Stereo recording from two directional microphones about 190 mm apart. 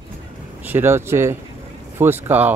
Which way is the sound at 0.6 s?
10° right (ahead or behind).